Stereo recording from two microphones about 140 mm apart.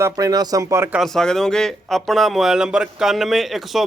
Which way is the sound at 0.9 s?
Centre (ahead or behind).